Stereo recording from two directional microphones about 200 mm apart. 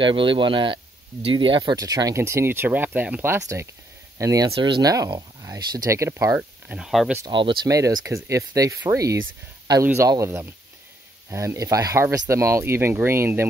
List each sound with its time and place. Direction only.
0.0 s speech: 25° right (ahead or behind); by 7.2 s centre (ahead or behind)
7.2 s speech: 25° right (ahead or behind)